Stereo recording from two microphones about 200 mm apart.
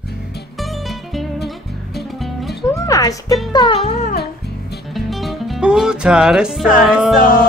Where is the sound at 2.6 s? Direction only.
15° left (ahead or behind); by 4.1 s 35° left (ahead or behind).